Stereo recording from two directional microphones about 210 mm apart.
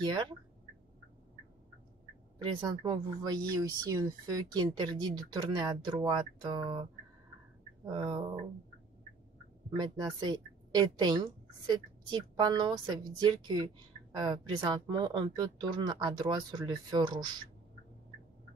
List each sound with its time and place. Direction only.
0.0 s speech: 20° right (ahead or behind)
2.3 s speech: 20° right (ahead or behind)
9.7 s speech: 20° right (ahead or behind)